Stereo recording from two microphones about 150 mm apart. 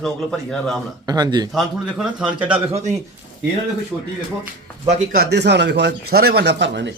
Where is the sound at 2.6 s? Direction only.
45° right (ahead or behind).